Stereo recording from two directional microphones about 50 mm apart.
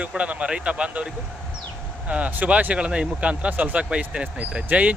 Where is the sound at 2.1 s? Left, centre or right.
Right.